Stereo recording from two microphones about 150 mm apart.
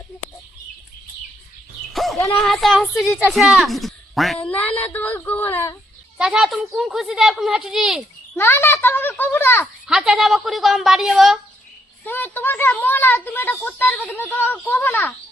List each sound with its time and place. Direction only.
1.9 s a sound: centre (ahead or behind)
2.1 s speech: 20° left (ahead or behind)
2.4 s a child's voice: centre (ahead or behind)
6.1 s a child's voice: 5° right (ahead or behind)
8.4 s a child's voice: 15° left (ahead or behind)
9.8 s a child's voice: 5° right (ahead or behind)
12.0 s a child's voice: 15° left (ahead or behind)